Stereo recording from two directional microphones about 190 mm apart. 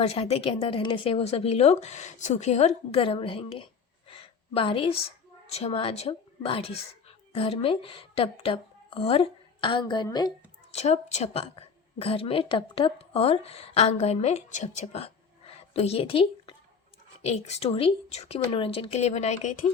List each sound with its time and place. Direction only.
0.0 s speech: 35° left (ahead or behind)
4.1 s a sound: 30° left (ahead or behind)
5.5 s a woman's voice: 35° left (ahead or behind)
10.7 s a woman's voice: 35° left (ahead or behind)